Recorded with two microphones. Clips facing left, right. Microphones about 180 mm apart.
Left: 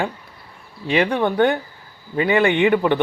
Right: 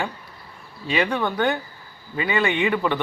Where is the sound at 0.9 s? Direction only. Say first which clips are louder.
Left 4 dB; 25° left (ahead or behind).